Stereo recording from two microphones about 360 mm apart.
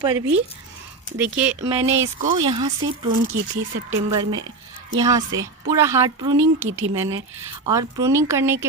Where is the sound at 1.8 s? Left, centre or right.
Right.